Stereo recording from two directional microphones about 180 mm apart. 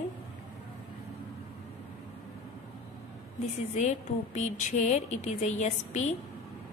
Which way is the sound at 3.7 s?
40° left (ahead or behind).